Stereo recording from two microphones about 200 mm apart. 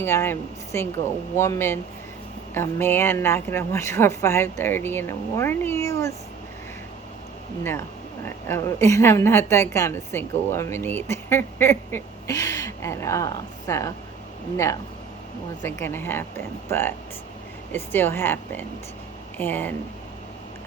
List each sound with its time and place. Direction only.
0.0 s a woman's voice: 10° left (ahead or behind)
8.2 s a woman's voice: 10° left (ahead or behind)